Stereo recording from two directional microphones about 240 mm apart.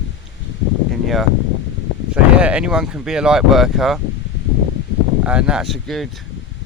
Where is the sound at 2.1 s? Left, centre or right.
Centre.